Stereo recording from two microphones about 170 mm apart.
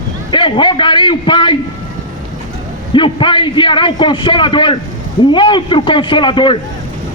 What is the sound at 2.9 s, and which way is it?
A man's voice, 30° left (ahead or behind).